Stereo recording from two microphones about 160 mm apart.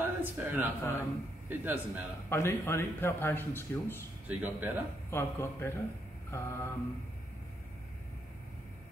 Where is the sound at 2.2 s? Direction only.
15° left (ahead or behind).